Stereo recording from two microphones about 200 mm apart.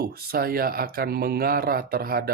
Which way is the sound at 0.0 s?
50° right (ahead or behind).